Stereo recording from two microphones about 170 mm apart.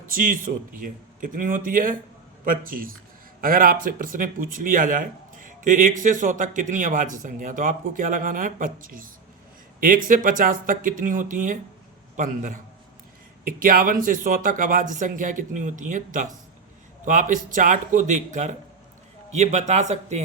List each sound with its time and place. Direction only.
0.0 s speech: 55° right (ahead or behind)